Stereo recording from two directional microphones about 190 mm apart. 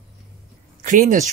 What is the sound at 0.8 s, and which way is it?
Speech, 45° right (ahead or behind).